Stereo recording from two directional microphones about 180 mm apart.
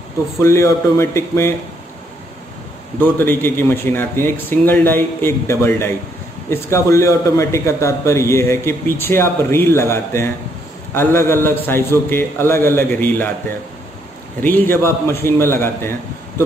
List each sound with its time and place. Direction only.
0.4 s a man's voice: 15° left (ahead or behind)
3.0 s a man's voice: 10° left (ahead or behind)
14.4 s a man's voice: 10° left (ahead or behind)